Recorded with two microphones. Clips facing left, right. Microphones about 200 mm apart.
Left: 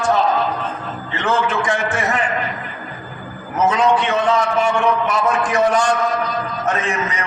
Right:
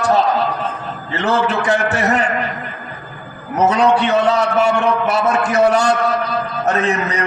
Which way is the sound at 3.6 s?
40° right (ahead or behind).